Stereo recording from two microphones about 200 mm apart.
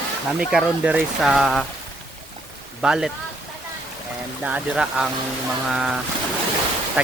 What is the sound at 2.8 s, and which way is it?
Speech, 5° right (ahead or behind).